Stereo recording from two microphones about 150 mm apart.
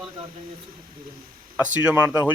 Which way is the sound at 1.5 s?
10° right (ahead or behind).